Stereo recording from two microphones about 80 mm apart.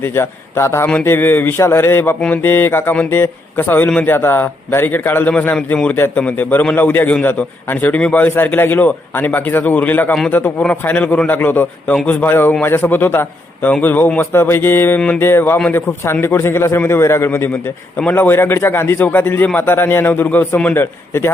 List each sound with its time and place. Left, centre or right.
0.0 s a man's voice: left
11.3 s a man's voice: left